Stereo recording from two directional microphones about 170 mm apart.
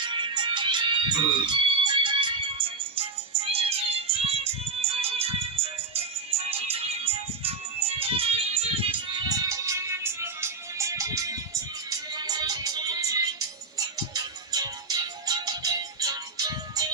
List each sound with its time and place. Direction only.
0.0 s music: 25° right (ahead or behind)